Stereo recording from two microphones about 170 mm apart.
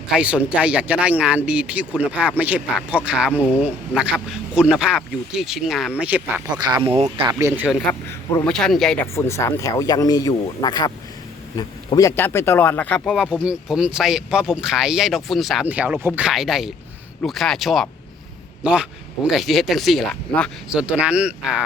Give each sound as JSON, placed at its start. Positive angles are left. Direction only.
{"t": 0.1, "sound": "speech", "side_deg": -5}
{"t": 6.5, "sound": "speech", "side_deg": -25}
{"t": 7.3, "sound": "speech", "side_deg": -15}
{"t": 8.4, "sound": "speech", "side_deg": 5}
{"t": 9.1, "sound": "speech", "side_deg": 15}
{"t": 13.3, "sound": "speech", "side_deg": -5}
{"t": 20.7, "sound": "speech", "side_deg": -5}